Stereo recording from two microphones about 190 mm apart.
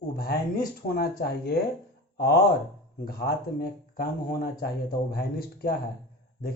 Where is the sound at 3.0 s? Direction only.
50° left (ahead or behind).